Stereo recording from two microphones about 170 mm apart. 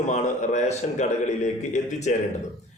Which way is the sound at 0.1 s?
45° left (ahead or behind).